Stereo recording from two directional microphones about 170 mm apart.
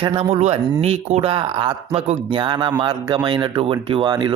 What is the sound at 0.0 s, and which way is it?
Speech, 30° right (ahead or behind).